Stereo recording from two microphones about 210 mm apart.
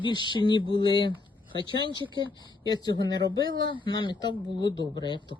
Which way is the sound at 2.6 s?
20° left (ahead or behind).